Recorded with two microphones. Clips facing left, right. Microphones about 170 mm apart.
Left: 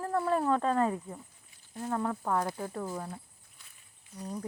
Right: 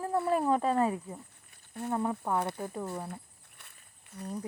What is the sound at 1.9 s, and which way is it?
Speech, 20° right (ahead or behind).